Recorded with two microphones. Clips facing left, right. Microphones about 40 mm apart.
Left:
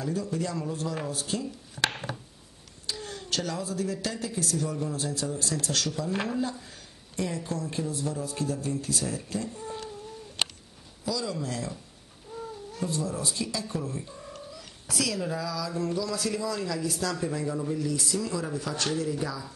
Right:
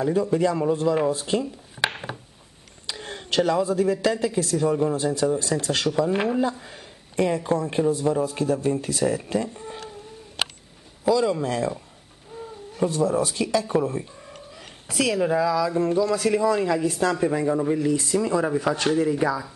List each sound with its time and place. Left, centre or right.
0.0 s speech: right
1.4 s a sound: centre
2.9 s speech: right
6.4 s speech: right
11.1 s speech: right
12.3 s a sound: right
12.8 s speech: right